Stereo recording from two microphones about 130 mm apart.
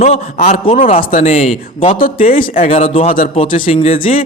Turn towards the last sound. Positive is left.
turn(degrees=45)  # may be behind; listen again after turning